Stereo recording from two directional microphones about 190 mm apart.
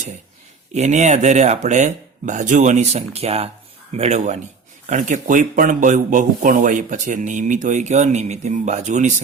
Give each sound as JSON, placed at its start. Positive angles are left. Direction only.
{"t": 0.7, "sound": "speech", "side_deg": -35}